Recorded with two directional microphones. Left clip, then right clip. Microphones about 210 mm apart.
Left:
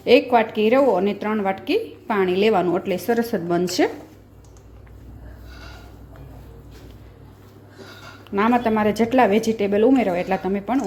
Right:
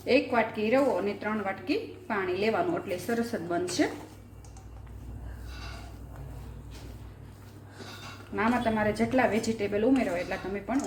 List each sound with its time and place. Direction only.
0.0 s a woman's voice: 45° left (ahead or behind)
8.4 s a woman's voice: 45° left (ahead or behind)